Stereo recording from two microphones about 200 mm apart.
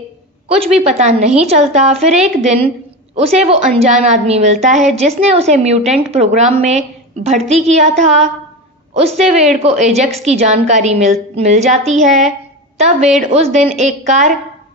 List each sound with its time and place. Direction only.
0.7 s a woman's voice: 30° right (ahead or behind)